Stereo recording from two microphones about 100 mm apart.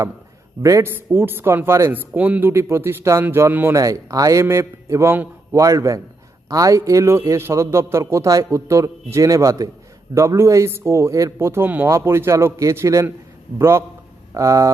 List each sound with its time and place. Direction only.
0.6 s a man's voice: 30° right (ahead or behind)
2.5 s a man's voice: 25° right (ahead or behind)
3.8 s a man's voice: 35° right (ahead or behind)